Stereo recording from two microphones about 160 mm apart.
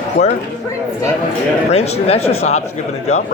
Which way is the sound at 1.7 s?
40° left (ahead or behind).